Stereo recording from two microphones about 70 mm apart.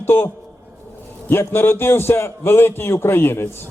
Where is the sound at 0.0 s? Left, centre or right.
Left.